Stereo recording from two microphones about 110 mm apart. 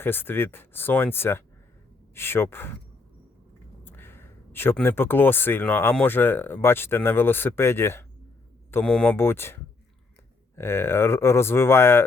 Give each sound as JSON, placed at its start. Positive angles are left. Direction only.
{"t": 0.0, "sound": "speech", "side_deg": 20}
{"t": 3.8, "sound": "speech", "side_deg": 20}
{"t": 8.8, "sound": "speech", "side_deg": 10}
{"t": 9.1, "sound": "speech", "side_deg": 20}